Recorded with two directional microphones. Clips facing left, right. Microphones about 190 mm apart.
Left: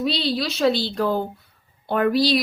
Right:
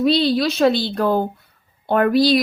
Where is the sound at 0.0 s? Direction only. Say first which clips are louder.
Right 7 dB; 50° right (ahead or behind).